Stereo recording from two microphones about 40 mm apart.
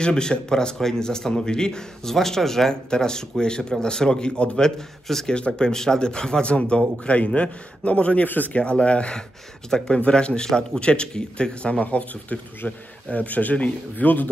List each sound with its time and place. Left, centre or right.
0.0 s a man's voice: left
5.3 s a man's voice: left
9.7 s speech: centre
9.9 s a man's voice: left
11.8 s speech: left